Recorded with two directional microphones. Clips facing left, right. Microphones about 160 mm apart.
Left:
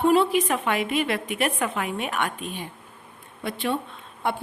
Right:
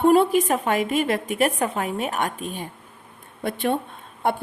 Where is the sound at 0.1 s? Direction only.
45° right (ahead or behind).